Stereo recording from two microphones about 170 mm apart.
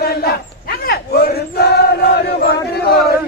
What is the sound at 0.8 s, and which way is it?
Battle cry, 70° left (ahead or behind).